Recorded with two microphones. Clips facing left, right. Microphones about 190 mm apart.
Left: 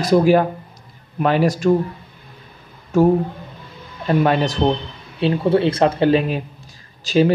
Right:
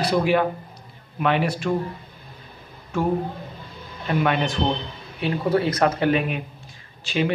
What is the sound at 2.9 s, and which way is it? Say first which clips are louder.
A man's voice: left 8 dB; 40° left (ahead or behind).